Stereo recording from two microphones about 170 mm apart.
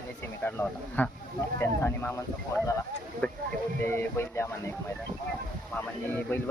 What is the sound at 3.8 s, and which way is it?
Speech, 15° left (ahead or behind).